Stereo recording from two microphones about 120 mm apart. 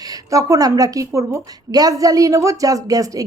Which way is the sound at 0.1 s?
30° right (ahead or behind).